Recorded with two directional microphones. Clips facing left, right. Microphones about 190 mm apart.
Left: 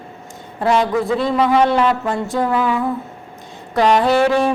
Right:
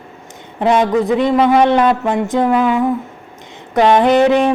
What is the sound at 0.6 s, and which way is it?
A woman's voice, 20° right (ahead or behind).